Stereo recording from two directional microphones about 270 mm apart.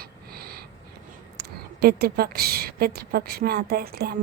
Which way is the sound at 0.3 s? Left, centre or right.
Right.